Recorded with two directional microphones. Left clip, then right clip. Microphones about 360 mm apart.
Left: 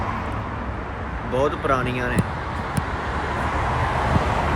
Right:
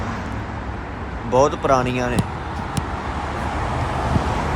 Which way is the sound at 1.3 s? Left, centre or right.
Centre.